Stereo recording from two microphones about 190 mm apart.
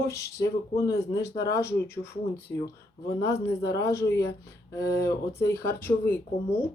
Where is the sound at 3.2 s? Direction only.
15° left (ahead or behind).